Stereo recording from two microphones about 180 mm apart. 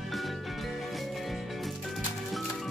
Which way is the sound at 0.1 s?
Centre (ahead or behind).